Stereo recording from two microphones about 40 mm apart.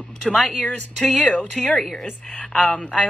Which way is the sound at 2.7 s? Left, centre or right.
Centre.